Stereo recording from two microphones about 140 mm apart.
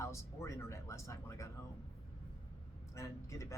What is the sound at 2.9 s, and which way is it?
Speech, 20° left (ahead or behind).